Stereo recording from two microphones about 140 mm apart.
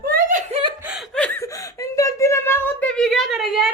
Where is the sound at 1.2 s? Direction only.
15° left (ahead or behind); by 3.7 s 5° right (ahead or behind).